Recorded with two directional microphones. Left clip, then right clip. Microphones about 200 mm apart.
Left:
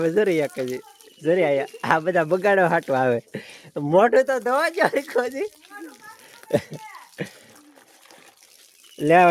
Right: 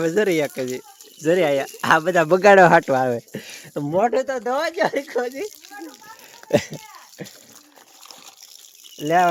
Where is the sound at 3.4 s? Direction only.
5° right (ahead or behind).